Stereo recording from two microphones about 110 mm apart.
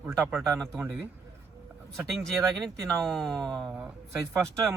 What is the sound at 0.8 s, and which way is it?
Speech, 15° right (ahead or behind).